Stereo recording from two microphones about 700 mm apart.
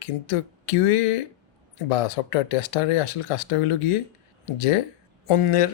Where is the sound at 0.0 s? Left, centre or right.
Left.